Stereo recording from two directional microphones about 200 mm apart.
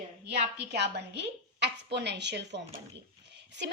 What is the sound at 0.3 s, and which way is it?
A woman's voice, 55° right (ahead or behind).